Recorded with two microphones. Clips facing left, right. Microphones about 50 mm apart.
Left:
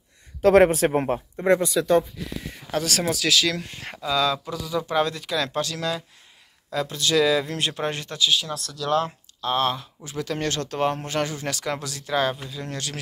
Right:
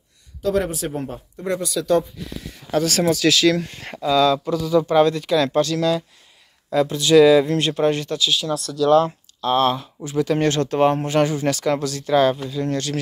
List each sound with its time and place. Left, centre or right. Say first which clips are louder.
0.4 s speech: left 6 dB; left
1.3 s speech: left 4 dB; left
2.7 s speech: right 6 dB; centre
3.6 s speech: right 2 dB; centre
3.9 s speech: right 6 dB; centre
5.6 s speech: right 8 dB; centre
6.7 s speech: right 8 dB; centre
7.5 s speech: right 7 dB; centre
7.9 s speech: right 3 dB; left
9.4 s speech: right 5 dB; centre
10.3 s speech: right 7 dB; right
11.4 s speech: right 8 dB; centre